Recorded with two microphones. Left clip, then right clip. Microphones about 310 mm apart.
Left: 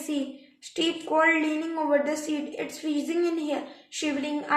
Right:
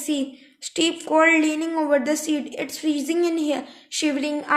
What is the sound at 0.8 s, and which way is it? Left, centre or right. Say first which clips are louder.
A woman's voice: right 5 dB; right.